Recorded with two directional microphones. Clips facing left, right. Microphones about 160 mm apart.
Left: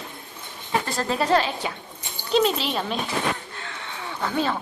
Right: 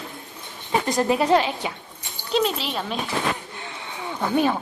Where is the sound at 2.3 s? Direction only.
5° right (ahead or behind).